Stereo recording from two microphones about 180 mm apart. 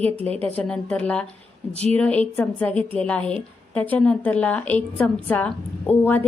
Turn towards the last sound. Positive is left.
turn(degrees=10)  # may be behind; listen again after turning